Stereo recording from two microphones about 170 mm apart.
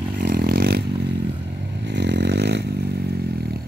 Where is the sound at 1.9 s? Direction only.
90° right.